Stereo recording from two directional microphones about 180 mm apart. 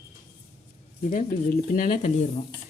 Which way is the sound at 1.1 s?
50° left (ahead or behind).